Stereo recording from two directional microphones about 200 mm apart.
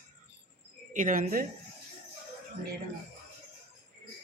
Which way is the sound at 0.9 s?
40° right (ahead or behind).